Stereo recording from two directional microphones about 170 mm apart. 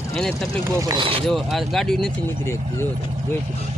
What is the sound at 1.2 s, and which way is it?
Speech, centre (ahead or behind).